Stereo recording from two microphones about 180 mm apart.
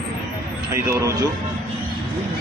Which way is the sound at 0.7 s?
15° right (ahead or behind).